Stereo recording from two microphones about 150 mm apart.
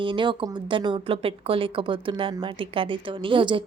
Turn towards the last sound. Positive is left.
turn(degrees=-35)  # may be behind; listen again after turning